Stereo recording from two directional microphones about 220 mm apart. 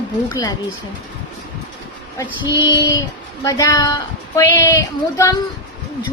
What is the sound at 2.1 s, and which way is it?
A woman's voice, 15° left (ahead or behind).